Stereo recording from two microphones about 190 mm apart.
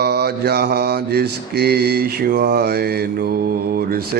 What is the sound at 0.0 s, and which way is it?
Mantra, 60° right (ahead or behind).